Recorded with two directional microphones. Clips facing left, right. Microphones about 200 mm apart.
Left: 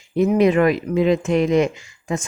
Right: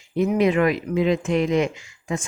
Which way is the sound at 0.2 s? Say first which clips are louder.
Left 3 dB; 40° left (ahead or behind).